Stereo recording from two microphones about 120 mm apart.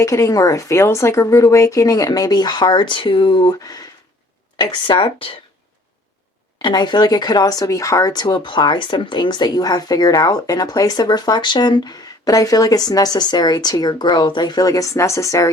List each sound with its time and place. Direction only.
0.0 s speech: 25° left (ahead or behind); by 3.5 s 45° left (ahead or behind)
3.6 s speech: 30° left (ahead or behind); by 5.4 s 50° left (ahead or behind)
6.6 s speech: 40° left (ahead or behind)